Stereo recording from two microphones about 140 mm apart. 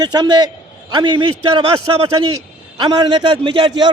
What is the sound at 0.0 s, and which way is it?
A man's voice, 30° right (ahead or behind).